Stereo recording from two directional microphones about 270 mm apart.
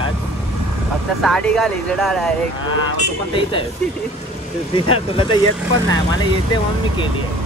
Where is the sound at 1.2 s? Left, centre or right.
Centre.